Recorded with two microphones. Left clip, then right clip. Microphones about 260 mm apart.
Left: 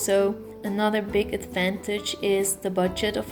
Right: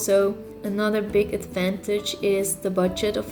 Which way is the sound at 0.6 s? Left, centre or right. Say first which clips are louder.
Right 1 dB; centre.